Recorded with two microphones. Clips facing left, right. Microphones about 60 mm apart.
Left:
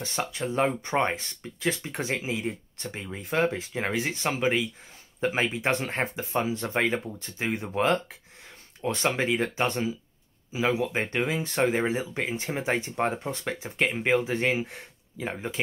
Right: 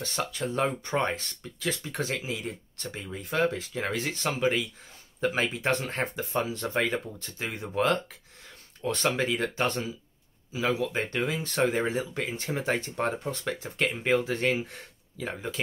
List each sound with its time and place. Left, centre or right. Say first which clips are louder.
0.0 s speech: left 1 dB; centre
15.2 s speech: left 2 dB; left